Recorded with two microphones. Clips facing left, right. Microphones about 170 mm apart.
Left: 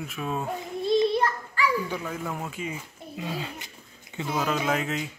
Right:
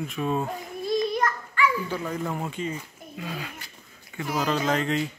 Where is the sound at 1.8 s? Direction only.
5° left (ahead or behind).